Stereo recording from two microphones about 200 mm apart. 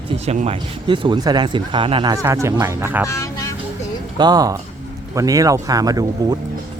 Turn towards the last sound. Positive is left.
turn(degrees=-20)  # may be behind; listen again after turning